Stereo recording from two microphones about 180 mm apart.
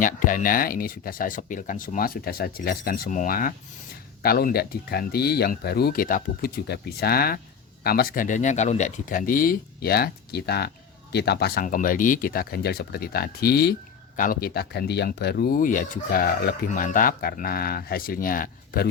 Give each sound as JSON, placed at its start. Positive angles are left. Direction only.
{"t": 0.0, "sound": "speech", "side_deg": 45}